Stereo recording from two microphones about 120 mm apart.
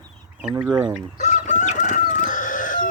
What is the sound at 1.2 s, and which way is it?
Crowing, 75° left (ahead or behind).